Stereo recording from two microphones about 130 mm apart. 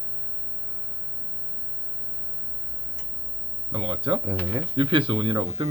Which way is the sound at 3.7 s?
45° right (ahead or behind).